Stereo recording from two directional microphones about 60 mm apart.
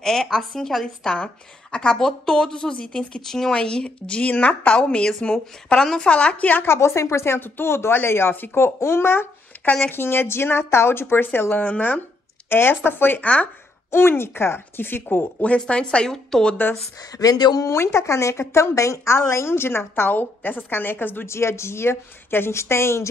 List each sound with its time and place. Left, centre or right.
0.0 s a woman's voice: centre
1.1 s a woman's voice: centre
6.6 s speech: left
12.4 s a woman's voice: left
13.8 s a woman's voice: left
15.4 s a woman's voice: centre
17.2 s speech: left
17.7 s a woman's voice: left
21.3 s speech: left